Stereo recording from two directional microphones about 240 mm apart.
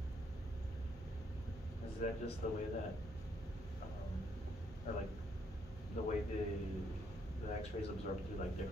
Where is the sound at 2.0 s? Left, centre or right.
Left.